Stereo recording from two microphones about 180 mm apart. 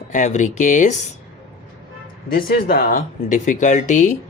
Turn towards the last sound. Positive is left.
turn(degrees=45)  # may be behind; listen again after turning